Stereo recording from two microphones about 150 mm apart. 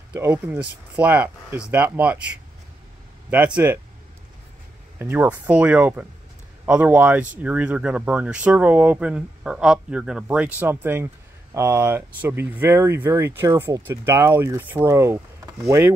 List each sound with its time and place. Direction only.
0.1 s speech: 15° right (ahead or behind)
4.9 s speech: 15° right (ahead or behind)